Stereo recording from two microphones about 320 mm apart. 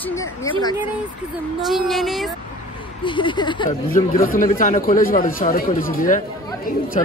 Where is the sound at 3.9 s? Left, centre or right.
Left.